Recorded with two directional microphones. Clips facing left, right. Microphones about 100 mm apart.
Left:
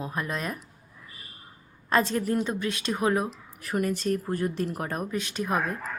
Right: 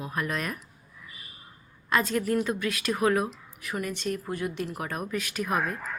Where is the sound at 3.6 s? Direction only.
40° left (ahead or behind).